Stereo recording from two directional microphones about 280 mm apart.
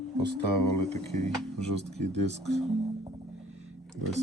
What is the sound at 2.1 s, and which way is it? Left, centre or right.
Speech, right.